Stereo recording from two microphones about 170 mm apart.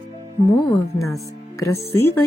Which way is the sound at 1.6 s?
20° left (ahead or behind).